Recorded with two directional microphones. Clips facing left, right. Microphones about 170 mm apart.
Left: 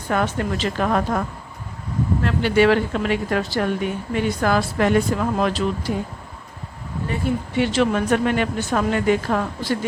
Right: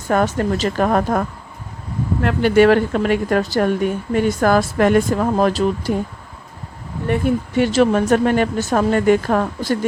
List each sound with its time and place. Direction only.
0.1 s a woman's voice: 45° right (ahead or behind)
2.2 s a woman's voice: 50° right (ahead or behind)
7.1 s a woman's voice: 50° right (ahead or behind)